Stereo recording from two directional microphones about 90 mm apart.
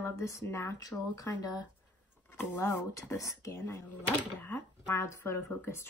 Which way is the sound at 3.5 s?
25° left (ahead or behind).